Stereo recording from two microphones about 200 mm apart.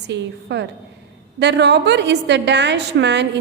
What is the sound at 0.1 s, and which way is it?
A woman's voice, 60° right (ahead or behind).